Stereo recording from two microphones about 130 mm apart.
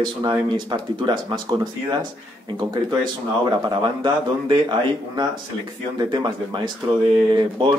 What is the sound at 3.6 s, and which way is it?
A man's voice, 35° right (ahead or behind).